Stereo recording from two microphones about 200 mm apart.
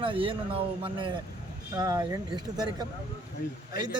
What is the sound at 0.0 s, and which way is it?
A man's voice, 25° right (ahead or behind).